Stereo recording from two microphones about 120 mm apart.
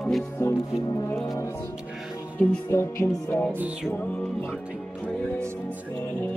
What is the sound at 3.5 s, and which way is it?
Speech, 10° right (ahead or behind).